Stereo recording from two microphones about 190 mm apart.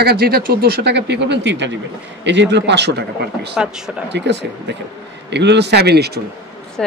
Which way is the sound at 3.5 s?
5° right (ahead or behind).